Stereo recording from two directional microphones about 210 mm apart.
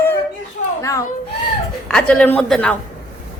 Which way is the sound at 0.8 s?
15° left (ahead or behind).